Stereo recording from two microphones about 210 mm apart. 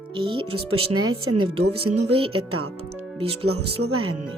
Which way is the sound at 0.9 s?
85° right.